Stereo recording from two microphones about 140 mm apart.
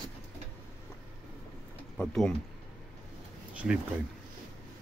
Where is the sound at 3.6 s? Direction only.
5° right (ahead or behind).